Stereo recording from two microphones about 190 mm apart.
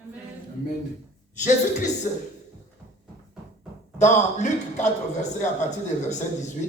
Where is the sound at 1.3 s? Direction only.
40° left (ahead or behind).